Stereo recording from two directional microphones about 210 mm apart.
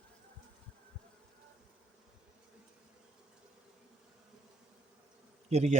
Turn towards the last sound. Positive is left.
turn(degrees=-30)  # may be behind; listen again after turning